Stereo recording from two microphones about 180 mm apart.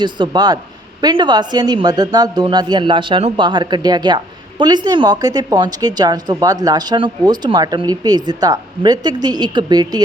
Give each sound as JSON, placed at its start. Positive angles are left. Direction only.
{"t": 0.0, "sound": "a woman's voice", "side_deg": -25}